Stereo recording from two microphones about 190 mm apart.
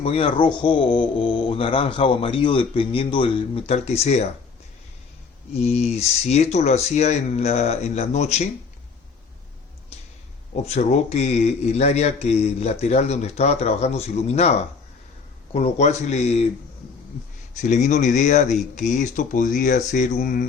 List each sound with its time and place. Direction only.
0.0 s speech: 30° left (ahead or behind)
5.5 s a man's voice: 35° left (ahead or behind)
10.5 s a man's voice: 35° left (ahead or behind)
15.5 s a man's voice: 35° left (ahead or behind)
17.6 s a man's voice: 40° left (ahead or behind)